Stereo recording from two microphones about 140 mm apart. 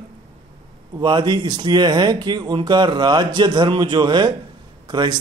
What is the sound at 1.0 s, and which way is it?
Speech, 35° right (ahead or behind).